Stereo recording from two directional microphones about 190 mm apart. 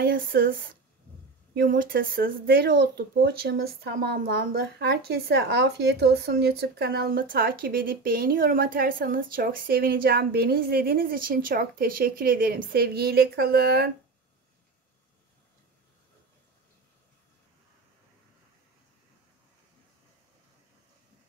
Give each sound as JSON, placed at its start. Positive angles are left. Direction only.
{"t": 0.0, "sound": "speech", "side_deg": -50}